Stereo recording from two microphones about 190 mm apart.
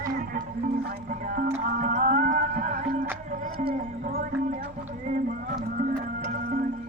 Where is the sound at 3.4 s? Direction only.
45° right (ahead or behind).